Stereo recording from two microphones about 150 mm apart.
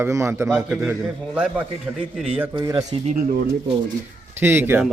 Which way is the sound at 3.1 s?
55° right (ahead or behind).